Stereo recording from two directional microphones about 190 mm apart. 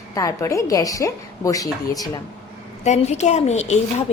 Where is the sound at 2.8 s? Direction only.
35° left (ahead or behind).